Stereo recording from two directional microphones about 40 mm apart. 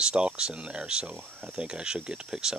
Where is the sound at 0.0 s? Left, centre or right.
Right.